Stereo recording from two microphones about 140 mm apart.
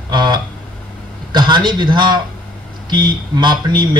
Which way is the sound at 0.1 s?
30° right (ahead or behind).